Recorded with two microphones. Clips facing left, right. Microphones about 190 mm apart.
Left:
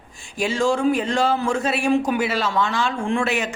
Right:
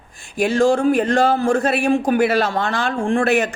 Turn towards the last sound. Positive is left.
turn(degrees=-60)  # may be behind; listen again after turning